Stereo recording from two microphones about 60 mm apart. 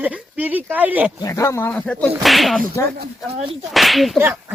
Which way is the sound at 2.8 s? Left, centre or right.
Left.